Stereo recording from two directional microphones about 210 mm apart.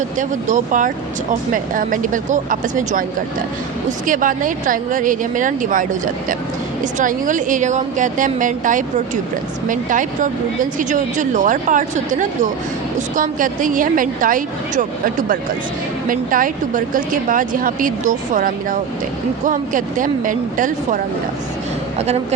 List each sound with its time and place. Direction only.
0.2 s speech: 35° right (ahead or behind)